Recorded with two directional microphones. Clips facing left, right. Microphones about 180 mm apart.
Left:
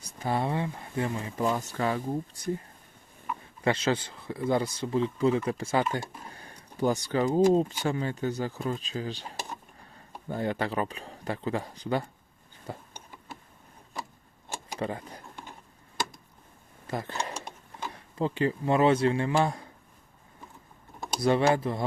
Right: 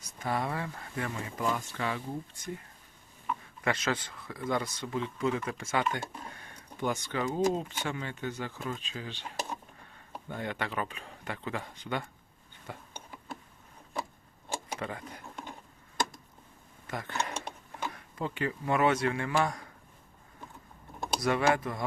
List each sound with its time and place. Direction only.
0.0 s speech: 30° left (ahead or behind)
10.2 s speech: 35° left (ahead or behind)
14.8 s speech: 30° left (ahead or behind)
16.8 s a sound: 30° left (ahead or behind)
17.9 s speech: 30° left (ahead or behind)
21.2 s speech: 30° left (ahead or behind)